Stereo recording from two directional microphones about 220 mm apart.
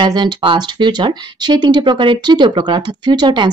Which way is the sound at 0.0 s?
20° right (ahead or behind).